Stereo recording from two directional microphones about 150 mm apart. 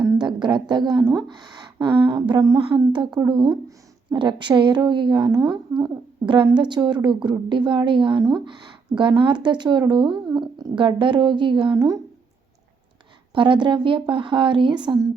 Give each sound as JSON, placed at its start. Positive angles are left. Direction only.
{"t": 0.0, "sound": "a woman's voice", "side_deg": -30}
{"t": 13.3, "sound": "a woman's voice", "side_deg": -35}